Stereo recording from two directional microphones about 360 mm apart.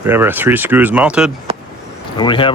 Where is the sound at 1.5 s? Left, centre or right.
Centre.